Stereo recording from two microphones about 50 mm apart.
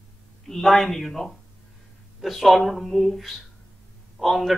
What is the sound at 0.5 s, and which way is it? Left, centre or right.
A man's voice, centre.